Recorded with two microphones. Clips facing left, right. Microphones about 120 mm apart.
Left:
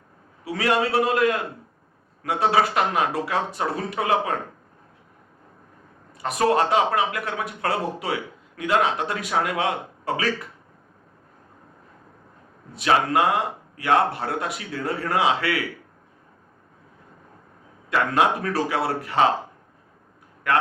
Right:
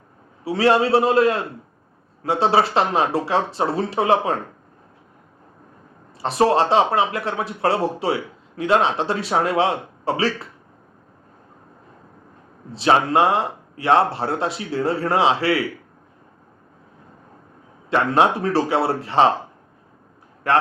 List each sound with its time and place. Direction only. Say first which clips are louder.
0.4 s speech: right 5 dB; 30° right (ahead or behind)
6.1 s speech: right 3 dB; 30° right (ahead or behind)
12.7 s speech: right 3 dB; 30° right (ahead or behind)
17.8 s speech: right 3 dB; 30° right (ahead or behind)
20.4 s a man's voice: right 3 dB; 30° right (ahead or behind)